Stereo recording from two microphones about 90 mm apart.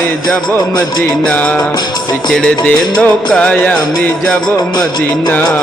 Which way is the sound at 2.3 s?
5° left (ahead or behind).